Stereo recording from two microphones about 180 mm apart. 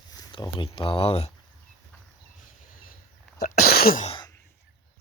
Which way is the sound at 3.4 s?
55° left (ahead or behind).